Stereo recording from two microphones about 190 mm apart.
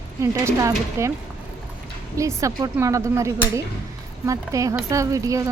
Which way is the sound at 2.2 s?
15° right (ahead or behind).